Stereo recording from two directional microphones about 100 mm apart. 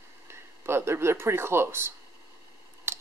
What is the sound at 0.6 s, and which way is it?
Speech, 25° right (ahead or behind).